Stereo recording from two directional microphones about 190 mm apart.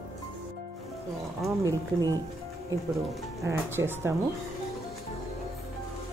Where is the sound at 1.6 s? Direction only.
15° right (ahead or behind).